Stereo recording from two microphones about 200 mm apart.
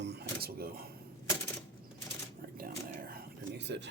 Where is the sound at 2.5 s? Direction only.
45° right (ahead or behind).